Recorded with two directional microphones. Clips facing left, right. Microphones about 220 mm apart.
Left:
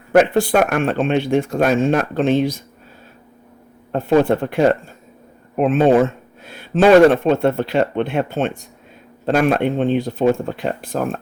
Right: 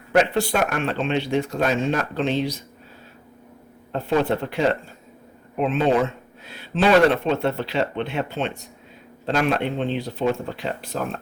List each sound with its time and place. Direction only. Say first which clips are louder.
0.1 s speech: left 6 dB; 50° left (ahead or behind)
3.9 s speech: left 6 dB; 50° left (ahead or behind)